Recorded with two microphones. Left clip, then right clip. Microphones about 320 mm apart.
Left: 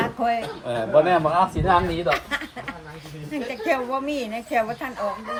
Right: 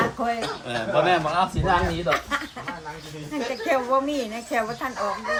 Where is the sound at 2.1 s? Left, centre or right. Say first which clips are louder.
Right 1 dB; centre.